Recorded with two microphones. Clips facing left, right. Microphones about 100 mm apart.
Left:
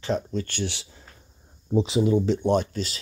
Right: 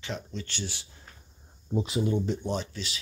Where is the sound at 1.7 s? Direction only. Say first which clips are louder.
Left 7 dB; 90° left; by 2.9 s 45° left (ahead or behind).